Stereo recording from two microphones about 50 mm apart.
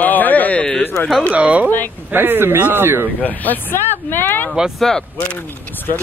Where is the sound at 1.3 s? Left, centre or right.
Right.